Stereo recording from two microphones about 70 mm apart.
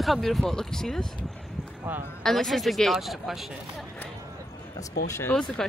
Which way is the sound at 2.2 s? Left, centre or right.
Centre.